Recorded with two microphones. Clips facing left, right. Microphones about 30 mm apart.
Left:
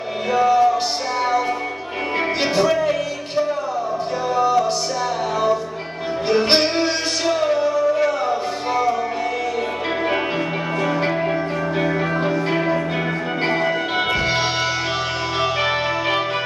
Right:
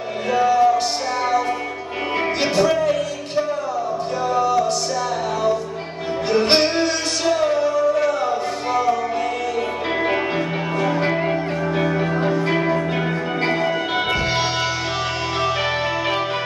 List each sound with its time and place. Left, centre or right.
0.3 s music: centre
2.1 s music: centre
6.3 s music: centre
12.5 s music: centre